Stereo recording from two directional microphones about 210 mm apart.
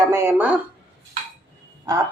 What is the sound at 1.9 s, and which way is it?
Speech, 15° right (ahead or behind).